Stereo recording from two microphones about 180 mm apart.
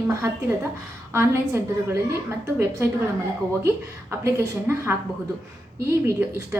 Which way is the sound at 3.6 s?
15° right (ahead or behind).